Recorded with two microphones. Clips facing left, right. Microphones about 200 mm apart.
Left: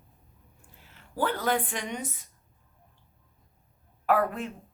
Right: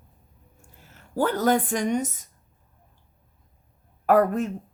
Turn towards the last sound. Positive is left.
turn(degrees=-45)  # may be behind; listen again after turning